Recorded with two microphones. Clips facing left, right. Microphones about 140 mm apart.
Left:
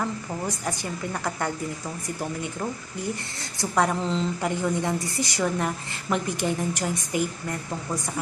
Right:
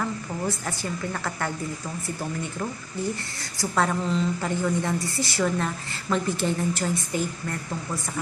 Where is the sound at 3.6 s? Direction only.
15° left (ahead or behind).